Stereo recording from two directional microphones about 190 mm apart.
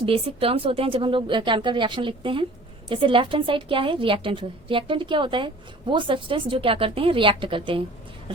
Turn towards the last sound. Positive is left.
turn(degrees=-25)  # may be behind; listen again after turning